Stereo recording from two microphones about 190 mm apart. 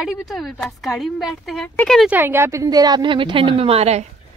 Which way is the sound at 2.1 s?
10° right (ahead or behind).